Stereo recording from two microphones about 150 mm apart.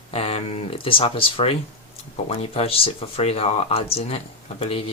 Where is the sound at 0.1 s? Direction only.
40° left (ahead or behind).